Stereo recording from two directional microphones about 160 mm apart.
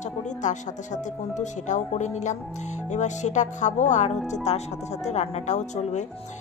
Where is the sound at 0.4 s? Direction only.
50° left (ahead or behind).